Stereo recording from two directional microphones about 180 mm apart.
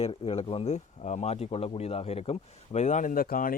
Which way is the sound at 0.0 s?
30° left (ahead or behind).